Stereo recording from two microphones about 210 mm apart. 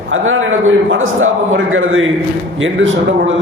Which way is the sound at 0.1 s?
70° right (ahead or behind).